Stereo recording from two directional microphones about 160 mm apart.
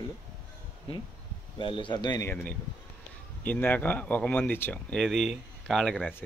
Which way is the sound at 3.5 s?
10° left (ahead or behind).